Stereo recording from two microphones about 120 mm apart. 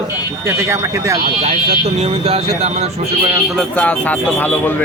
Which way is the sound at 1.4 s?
70° right (ahead or behind).